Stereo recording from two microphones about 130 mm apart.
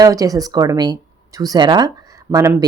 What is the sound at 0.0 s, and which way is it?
A woman's voice, 25° right (ahead or behind).